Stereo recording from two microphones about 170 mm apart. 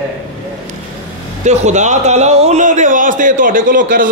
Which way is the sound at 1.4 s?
40° right (ahead or behind).